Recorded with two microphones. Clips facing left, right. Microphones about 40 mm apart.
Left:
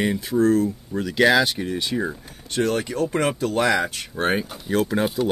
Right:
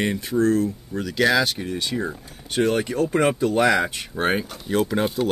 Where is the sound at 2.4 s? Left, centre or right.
Centre.